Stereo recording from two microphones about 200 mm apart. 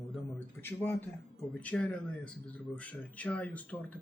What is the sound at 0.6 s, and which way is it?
Speech, 10° left (ahead or behind).